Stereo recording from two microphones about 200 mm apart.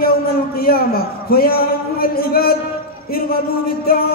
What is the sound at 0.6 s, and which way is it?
A man's voice, 50° left (ahead or behind).